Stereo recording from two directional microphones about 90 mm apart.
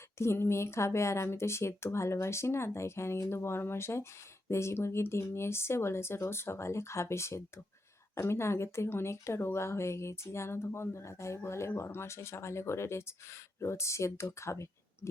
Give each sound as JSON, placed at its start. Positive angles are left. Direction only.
{"t": 0.2, "sound": "a woman's voice", "side_deg": 30}